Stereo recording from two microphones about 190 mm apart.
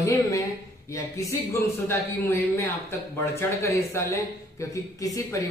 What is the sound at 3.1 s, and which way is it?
Speech, 15° left (ahead or behind).